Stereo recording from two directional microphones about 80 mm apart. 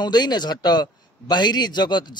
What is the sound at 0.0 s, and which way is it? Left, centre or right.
A man's voice, left.